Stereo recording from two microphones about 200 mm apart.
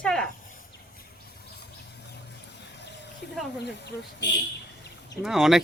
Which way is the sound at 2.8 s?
60° left (ahead or behind).